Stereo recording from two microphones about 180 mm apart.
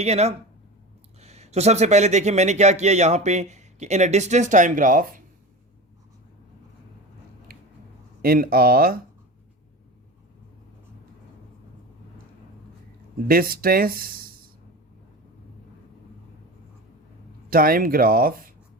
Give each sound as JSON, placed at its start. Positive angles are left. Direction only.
{"t": 0.0, "sound": "a man's voice", "side_deg": -35}
{"t": 7.5, "sound": "a sound", "side_deg": -55}
{"t": 8.2, "sound": "speech", "side_deg": -55}
{"t": 13.2, "sound": "speech", "side_deg": -55}
{"t": 17.5, "sound": "speech", "side_deg": -55}